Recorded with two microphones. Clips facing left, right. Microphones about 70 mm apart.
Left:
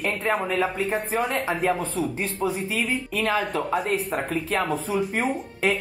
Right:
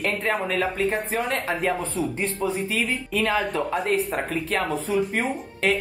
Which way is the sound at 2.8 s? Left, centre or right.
Centre.